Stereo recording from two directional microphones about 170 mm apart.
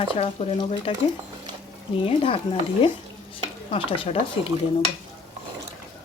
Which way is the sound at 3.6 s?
30° left (ahead or behind).